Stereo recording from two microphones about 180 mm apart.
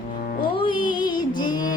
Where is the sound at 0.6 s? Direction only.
25° left (ahead or behind).